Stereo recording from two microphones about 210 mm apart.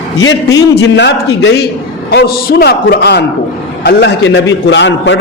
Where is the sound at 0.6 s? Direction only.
55° left (ahead or behind).